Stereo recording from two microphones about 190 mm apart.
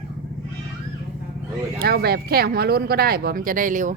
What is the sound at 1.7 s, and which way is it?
Speech, 55° right (ahead or behind).